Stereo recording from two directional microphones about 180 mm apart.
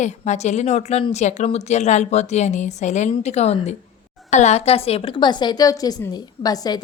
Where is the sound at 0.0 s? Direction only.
40° left (ahead or behind).